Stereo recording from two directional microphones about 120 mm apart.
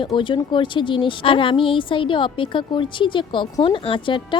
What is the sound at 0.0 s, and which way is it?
A woman's voice, 40° left (ahead or behind).